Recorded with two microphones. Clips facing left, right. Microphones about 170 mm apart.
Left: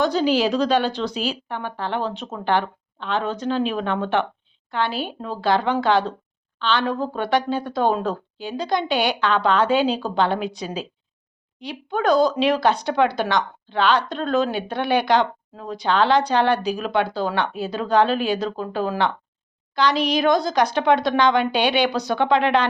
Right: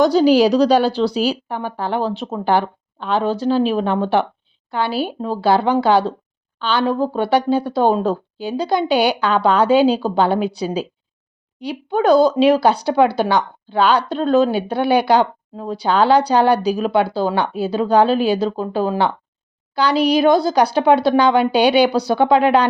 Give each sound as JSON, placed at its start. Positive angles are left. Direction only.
{"t": 0.0, "sound": "speech", "side_deg": -40}